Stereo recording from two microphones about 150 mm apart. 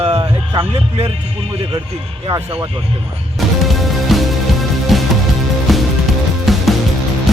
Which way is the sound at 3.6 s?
Centre (ahead or behind).